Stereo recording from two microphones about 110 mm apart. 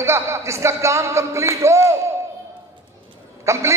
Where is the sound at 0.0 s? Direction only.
25° right (ahead or behind).